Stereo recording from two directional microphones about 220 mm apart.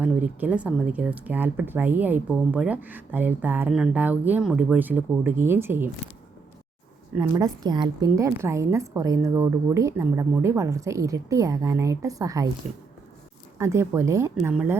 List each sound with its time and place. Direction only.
0.0 s speech: 5° right (ahead or behind)
7.2 s speech: 15° right (ahead or behind)
13.6 s speech: 10° right (ahead or behind)